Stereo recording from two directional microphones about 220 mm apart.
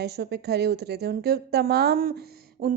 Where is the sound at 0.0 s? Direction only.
50° right (ahead or behind).